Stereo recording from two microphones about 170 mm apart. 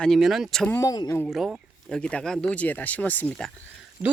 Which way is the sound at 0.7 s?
20° left (ahead or behind).